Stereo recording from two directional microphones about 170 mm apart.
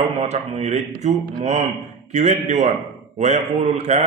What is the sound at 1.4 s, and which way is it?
A man's voice, 40° right (ahead or behind).